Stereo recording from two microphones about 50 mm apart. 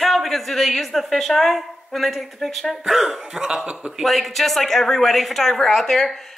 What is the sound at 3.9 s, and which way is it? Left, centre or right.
A woman's voice, centre.